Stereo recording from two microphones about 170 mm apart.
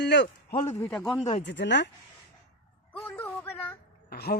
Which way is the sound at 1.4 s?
90° left.